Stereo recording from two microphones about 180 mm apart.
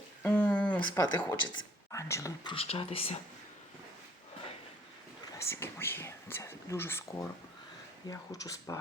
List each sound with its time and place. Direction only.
0.2 s a sound: 10° left (ahead or behind)
0.9 s speech: 25° left (ahead or behind)
5.5 s speech: 15° left (ahead or behind)